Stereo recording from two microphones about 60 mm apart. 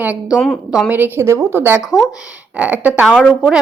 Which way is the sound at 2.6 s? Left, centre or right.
Right.